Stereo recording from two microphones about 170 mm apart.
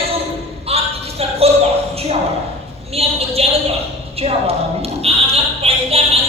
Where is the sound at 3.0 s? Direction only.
35° right (ahead or behind).